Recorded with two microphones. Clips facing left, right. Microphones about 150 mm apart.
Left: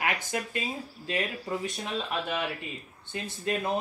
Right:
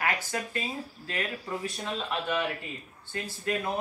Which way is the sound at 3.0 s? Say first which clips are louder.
Even; 20° left (ahead or behind).